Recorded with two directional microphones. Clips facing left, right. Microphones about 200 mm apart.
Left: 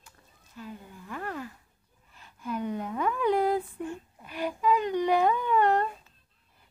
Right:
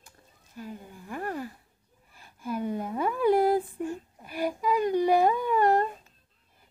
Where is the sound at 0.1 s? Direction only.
40° right (ahead or behind).